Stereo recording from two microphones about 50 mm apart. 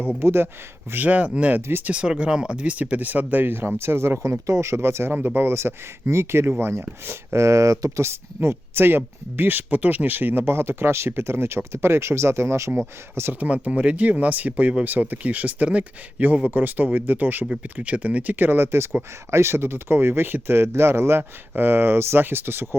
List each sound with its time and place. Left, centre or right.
0.2 s speech: right
1.0 s speech: right
3.4 s speech: right
3.8 s speech: right
5.1 s speech: right
5.5 s speech: right
7.3 s speech: right
8.4 s speech: right
13.4 s speech: right
14.8 s speech: right
17.7 s speech: right
21.5 s speech: right